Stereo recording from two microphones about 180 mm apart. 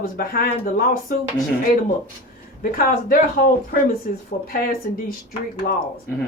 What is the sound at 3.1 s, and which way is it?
A woman's voice, 55° left (ahead or behind).